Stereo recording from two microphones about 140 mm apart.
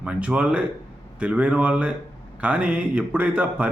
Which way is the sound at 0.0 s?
10° right (ahead or behind).